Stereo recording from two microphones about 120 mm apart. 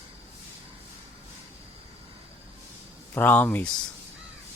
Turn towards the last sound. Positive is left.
turn(degrees=10)  # may be behind; listen again after turning